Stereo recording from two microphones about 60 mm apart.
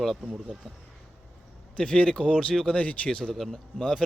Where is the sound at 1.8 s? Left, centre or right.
Centre.